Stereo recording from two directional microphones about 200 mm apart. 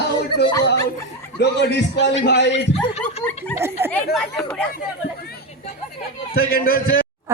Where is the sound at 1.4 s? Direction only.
60° left (ahead or behind).